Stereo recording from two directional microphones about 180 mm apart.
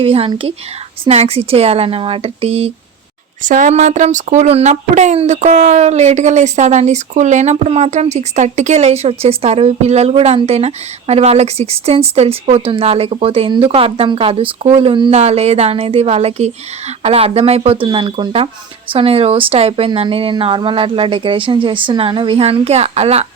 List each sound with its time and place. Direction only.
0.0 s speech: 30° right (ahead or behind)
3.4 s speech: 45° right (ahead or behind)